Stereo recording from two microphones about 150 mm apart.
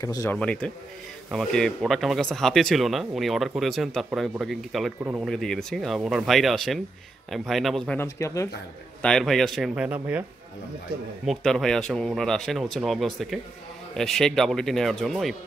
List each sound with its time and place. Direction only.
0.0 s speech: 20° left (ahead or behind)
0.4 s speech: 5° left (ahead or behind)
8.0 s speech: 20° left (ahead or behind)
9.0 s speech: 5° left (ahead or behind)
9.8 s speech: 10° right (ahead or behind)
11.2 s speech: centre (ahead or behind)